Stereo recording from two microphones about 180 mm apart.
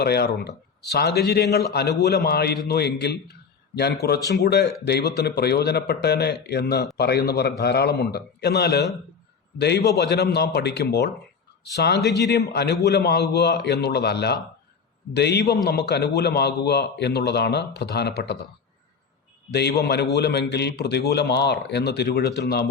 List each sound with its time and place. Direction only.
0.0 s a man's voice: 60° left (ahead or behind)
19.5 s a man's voice: 65° left (ahead or behind)